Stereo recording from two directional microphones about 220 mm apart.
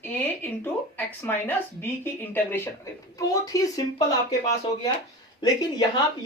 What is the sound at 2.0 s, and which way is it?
Speech, 10° left (ahead or behind).